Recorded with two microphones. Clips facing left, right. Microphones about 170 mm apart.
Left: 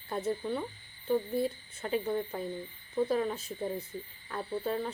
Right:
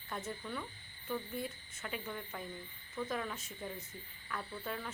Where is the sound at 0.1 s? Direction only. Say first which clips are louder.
Left 10 dB; 35° left (ahead or behind).